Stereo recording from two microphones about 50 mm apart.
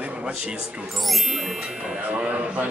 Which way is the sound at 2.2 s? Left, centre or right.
Right.